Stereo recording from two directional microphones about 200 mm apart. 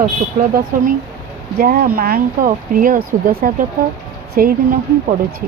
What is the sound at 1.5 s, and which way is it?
Speech, 50° right (ahead or behind).